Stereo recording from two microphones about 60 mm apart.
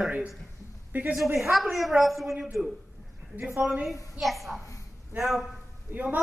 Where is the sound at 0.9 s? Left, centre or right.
Right.